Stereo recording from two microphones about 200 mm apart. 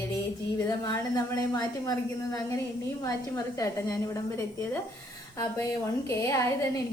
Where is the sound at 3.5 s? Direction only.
15° left (ahead or behind).